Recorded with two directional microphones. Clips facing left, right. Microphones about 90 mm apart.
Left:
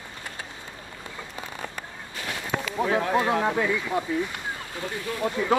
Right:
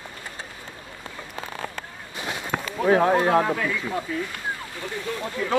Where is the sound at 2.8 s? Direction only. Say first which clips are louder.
Right 6 dB; 40° right (ahead or behind).